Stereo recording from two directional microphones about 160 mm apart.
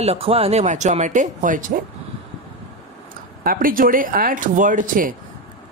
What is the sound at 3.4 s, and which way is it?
Speech, 65° right (ahead or behind).